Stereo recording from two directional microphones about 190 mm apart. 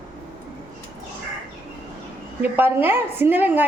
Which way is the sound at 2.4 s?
10° right (ahead or behind).